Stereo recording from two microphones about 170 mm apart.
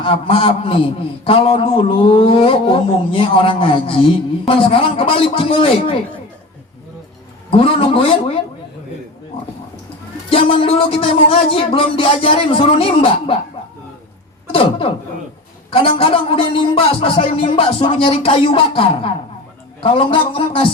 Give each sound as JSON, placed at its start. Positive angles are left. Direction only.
{"t": 0.0, "sound": "a man's voice", "side_deg": 30}
{"t": 7.5, "sound": "a man's voice", "side_deg": 30}
{"t": 10.5, "sound": "a man's voice", "side_deg": 30}
{"t": 14.5, "sound": "a man's voice", "side_deg": 30}